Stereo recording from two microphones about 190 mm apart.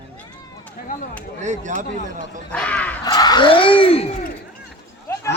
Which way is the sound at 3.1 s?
20° left (ahead or behind).